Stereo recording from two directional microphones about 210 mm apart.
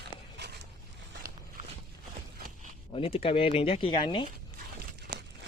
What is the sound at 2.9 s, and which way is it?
Speech, 25° left (ahead or behind).